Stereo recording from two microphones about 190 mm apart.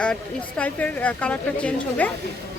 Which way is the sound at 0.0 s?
5° left (ahead or behind).